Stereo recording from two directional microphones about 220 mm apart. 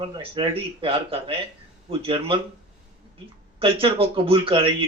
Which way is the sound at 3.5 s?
25° right (ahead or behind).